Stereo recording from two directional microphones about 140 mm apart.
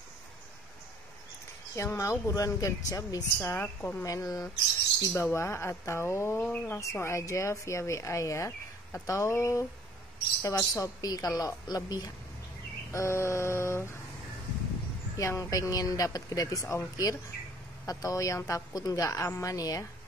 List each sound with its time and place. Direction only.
1.8 s speech: 20° left (ahead or behind)
3.3 s a woman's voice: 15° left (ahead or behind)
4.0 s speech: 25° left (ahead or behind)
15.1 s speech: 25° left (ahead or behind)